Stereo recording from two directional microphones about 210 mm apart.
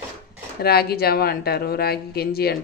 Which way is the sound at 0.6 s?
45° left (ahead or behind).